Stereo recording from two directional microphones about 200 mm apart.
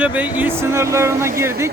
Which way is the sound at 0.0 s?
10° right (ahead or behind).